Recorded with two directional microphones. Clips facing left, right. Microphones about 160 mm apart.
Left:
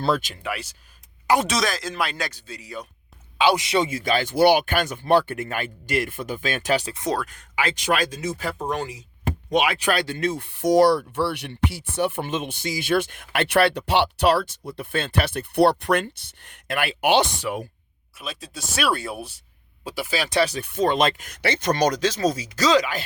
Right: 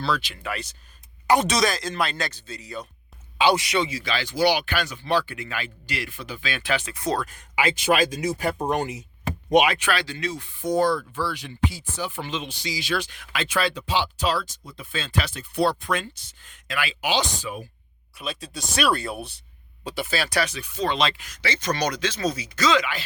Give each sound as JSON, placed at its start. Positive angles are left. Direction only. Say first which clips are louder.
{"t": 0.0, "sound": "speech", "louder": "left 4 dB", "side_deg": 45}
{"t": 0.4, "sound": "speech", "louder": "left 2 dB", "side_deg": 10}
{"t": 3.5, "sound": "speech", "louder": "even", "side_deg": 20}
{"t": 3.8, "sound": "speech", "louder": "left 4 dB", "side_deg": 45}
{"t": 6.9, "sound": "speech", "louder": "even", "side_deg": 20}
{"t": 7.3, "sound": "speech", "louder": "right 2 dB", "side_deg": -10}
{"t": 9.7, "sound": "speech", "louder": "left 3 dB", "side_deg": 40}
{"t": 10.6, "sound": "speech", "louder": "left 5 dB", "side_deg": 85}
{"t": 18.2, "sound": "speech", "louder": "right 2 dB", "side_deg": 0}
{"t": 20.6, "sound": "speech", "louder": "left 4 dB", "side_deg": 55}